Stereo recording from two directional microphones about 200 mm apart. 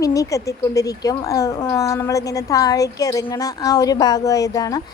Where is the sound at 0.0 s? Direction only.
15° left (ahead or behind).